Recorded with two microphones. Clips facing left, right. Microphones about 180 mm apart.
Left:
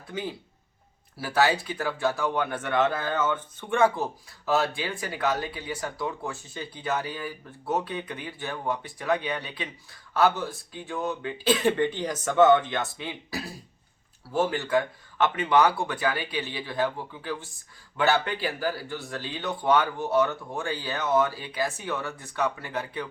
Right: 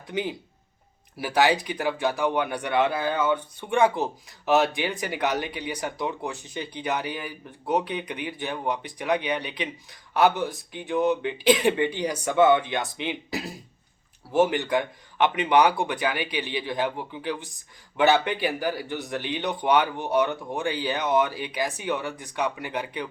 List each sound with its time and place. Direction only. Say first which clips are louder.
0.1 s speech: right 4 dB; 20° right (ahead or behind)